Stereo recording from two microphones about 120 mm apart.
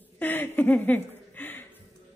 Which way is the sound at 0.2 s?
15° left (ahead or behind).